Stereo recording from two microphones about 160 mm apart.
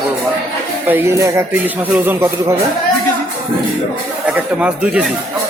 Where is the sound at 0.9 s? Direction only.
15° right (ahead or behind).